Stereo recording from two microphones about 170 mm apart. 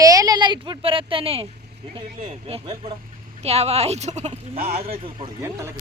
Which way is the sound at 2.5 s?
35° right (ahead or behind).